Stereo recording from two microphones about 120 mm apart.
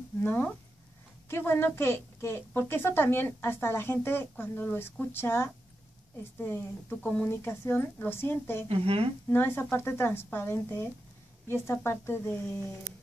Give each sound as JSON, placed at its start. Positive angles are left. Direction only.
{"t": 0.2, "sound": "a woman's voice", "side_deg": 15}
{"t": 8.6, "sound": "speech", "side_deg": -55}
{"t": 9.3, "sound": "a woman's voice", "side_deg": 20}